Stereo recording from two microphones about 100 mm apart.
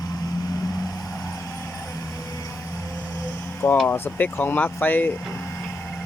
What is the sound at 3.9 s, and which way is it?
Speech, 20° left (ahead or behind).